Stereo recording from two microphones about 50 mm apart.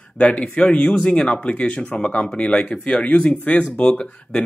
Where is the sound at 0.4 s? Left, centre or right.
Left.